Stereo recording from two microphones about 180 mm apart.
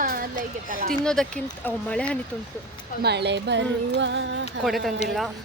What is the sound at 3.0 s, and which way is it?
Music, 70° right (ahead or behind).